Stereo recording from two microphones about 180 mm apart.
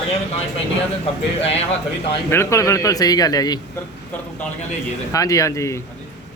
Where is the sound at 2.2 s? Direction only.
15° left (ahead or behind).